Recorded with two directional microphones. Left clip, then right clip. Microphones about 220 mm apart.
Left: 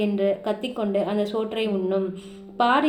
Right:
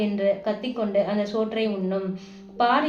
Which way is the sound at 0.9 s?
50° left (ahead or behind).